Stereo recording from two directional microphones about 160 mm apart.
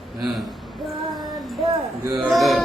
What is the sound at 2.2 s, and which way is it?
Speech, centre (ahead or behind).